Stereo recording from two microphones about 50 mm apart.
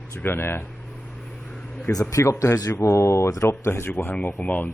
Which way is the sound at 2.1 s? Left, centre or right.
Left.